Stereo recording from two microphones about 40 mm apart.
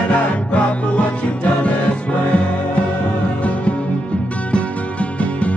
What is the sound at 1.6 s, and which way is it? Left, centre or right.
Music, left.